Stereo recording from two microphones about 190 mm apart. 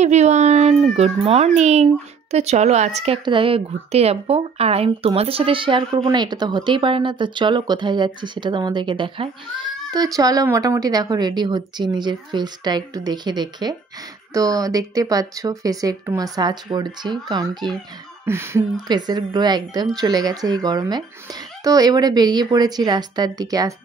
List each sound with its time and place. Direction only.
0.0 s speech: 35° right (ahead or behind); by 23.7 s 20° right (ahead or behind)